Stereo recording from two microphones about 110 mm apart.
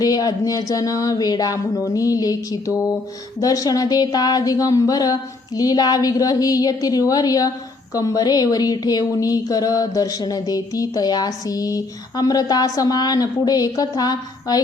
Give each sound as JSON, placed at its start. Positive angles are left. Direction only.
{"t": 0.0, "sound": "speech", "side_deg": 35}